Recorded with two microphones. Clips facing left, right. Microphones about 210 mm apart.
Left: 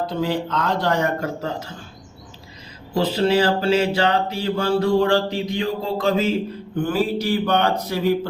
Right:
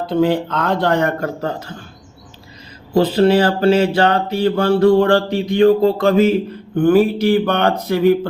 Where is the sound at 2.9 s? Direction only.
55° right (ahead or behind).